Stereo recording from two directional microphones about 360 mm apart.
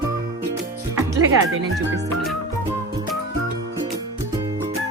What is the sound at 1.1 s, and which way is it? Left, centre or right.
Speech, right.